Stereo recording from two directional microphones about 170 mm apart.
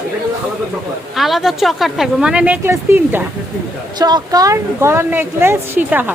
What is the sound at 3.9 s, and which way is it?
A woman's voice, 25° right (ahead or behind).